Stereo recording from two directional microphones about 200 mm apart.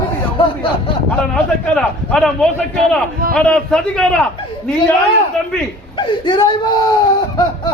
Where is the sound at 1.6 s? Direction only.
5° left (ahead or behind).